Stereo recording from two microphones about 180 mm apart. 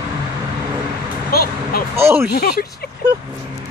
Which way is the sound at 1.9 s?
15° right (ahead or behind).